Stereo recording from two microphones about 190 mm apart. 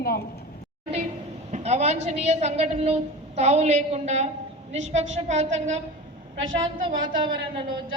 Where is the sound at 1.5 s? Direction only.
35° right (ahead or behind).